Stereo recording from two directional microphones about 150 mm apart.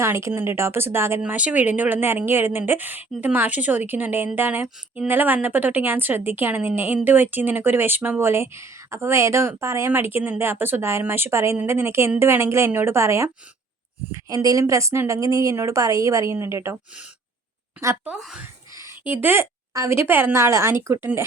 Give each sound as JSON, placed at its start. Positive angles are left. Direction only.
{"t": 0.0, "sound": "a woman's voice", "side_deg": -20}
{"t": 17.7, "sound": "a woman's voice", "side_deg": -15}
{"t": 18.1, "sound": "speech", "side_deg": -5}
{"t": 18.8, "sound": "a woman's voice", "side_deg": -15}